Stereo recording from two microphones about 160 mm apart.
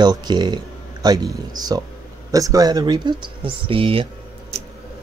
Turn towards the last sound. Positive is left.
turn(degrees=-35)  # may be behind; listen again after turning